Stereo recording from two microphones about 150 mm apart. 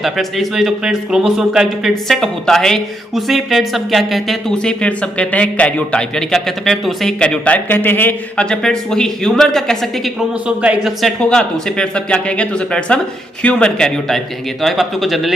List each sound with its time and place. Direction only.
0.0 s a man's voice: centre (ahead or behind)